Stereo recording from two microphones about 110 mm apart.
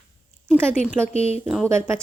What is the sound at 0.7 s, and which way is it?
Speech, 15° right (ahead or behind).